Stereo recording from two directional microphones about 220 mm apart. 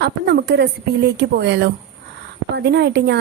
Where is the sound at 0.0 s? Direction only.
50° right (ahead or behind).